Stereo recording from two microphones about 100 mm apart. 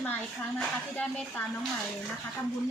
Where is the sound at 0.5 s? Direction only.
15° left (ahead or behind).